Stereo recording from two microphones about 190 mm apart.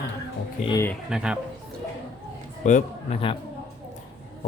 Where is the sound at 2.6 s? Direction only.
40° left (ahead or behind).